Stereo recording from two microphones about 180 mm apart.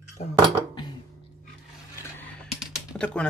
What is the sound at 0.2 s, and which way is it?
Cutlery, 45° left (ahead or behind).